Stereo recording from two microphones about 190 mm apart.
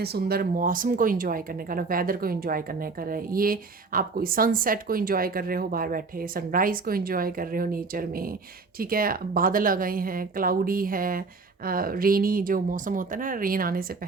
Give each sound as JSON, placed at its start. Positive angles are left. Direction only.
{"t": 0.0, "sound": "speech", "side_deg": -55}